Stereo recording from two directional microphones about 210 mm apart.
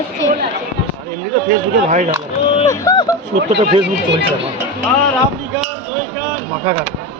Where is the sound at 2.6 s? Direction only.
15° left (ahead or behind).